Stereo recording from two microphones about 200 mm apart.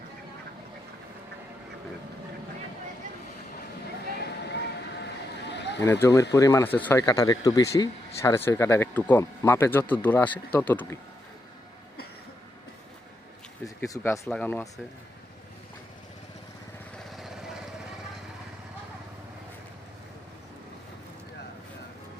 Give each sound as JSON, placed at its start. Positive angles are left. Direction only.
{"t": 5.4, "sound": "a sound", "side_deg": 60}
{"t": 5.8, "sound": "speech", "side_deg": 15}
{"t": 13.7, "sound": "speech", "side_deg": 15}
{"t": 17.1, "sound": "vehicle", "side_deg": 0}